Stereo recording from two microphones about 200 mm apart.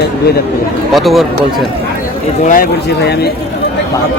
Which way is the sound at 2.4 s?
45° left (ahead or behind).